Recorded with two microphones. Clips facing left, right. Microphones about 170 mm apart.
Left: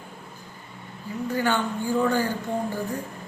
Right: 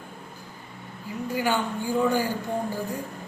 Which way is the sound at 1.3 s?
10° right (ahead or behind).